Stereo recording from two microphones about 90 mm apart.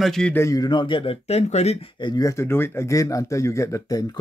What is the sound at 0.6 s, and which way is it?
Speech, 55° left (ahead or behind).